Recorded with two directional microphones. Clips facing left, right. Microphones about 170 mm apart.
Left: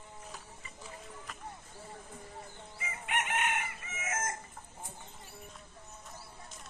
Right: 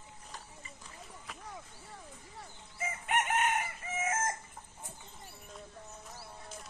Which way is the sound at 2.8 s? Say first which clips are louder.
Right 4 dB; 45° right (ahead or behind).